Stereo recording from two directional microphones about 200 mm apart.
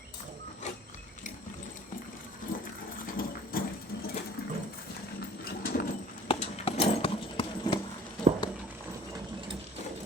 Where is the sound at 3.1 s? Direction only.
45° left (ahead or behind).